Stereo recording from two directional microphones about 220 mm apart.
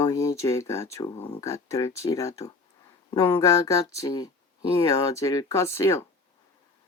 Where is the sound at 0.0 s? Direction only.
15° left (ahead or behind).